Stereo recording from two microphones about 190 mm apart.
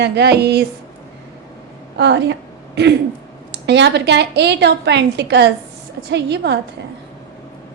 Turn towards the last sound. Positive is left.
turn(degrees=-65)  # may be behind; listen again after turning